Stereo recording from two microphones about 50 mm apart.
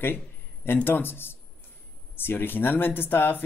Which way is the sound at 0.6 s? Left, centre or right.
Left.